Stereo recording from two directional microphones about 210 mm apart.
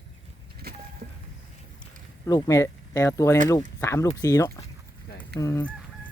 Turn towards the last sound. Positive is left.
turn(degrees=10)  # may be behind; listen again after turning